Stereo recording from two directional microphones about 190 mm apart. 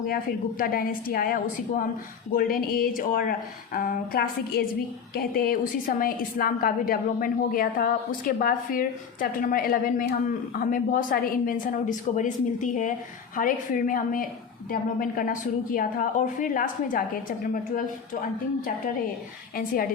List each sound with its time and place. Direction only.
0.6 s a woman's voice: 50° left (ahead or behind)
19.5 s a woman's voice: 50° left (ahead or behind)